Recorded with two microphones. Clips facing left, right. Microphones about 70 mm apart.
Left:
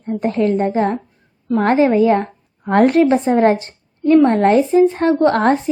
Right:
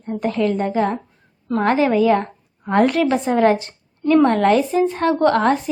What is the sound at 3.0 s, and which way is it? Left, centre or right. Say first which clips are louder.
A woman's voice: left 4 dB; left.